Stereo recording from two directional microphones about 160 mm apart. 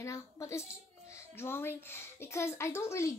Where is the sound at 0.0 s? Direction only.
20° left (ahead or behind).